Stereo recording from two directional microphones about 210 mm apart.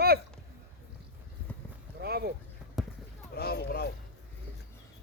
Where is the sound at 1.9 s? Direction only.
50° right (ahead or behind).